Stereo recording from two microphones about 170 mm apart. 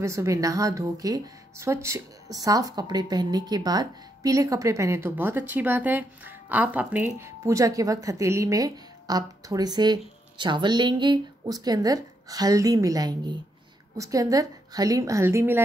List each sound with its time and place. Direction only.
0.0 s speech: 15° right (ahead or behind)